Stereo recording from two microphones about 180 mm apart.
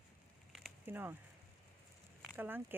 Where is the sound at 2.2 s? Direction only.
10° right (ahead or behind).